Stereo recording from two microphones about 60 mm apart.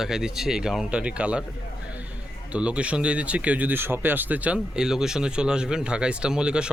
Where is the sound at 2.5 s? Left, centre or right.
Centre.